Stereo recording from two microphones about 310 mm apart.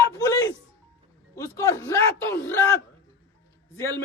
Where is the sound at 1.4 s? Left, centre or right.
Centre.